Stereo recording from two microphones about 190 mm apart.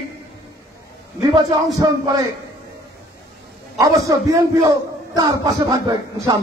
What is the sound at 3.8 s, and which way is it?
A man's voice, 15° right (ahead or behind).